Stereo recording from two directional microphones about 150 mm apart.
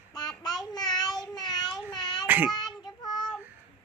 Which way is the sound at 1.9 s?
30° left (ahead or behind).